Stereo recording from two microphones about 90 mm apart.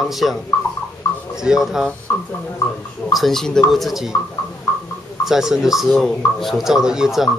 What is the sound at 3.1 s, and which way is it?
A man's voice, centre (ahead or behind).